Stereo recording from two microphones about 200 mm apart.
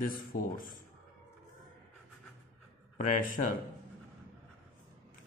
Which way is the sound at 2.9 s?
40° left (ahead or behind).